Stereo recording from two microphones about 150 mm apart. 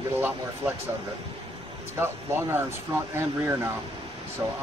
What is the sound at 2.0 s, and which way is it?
Speech, 15° right (ahead or behind).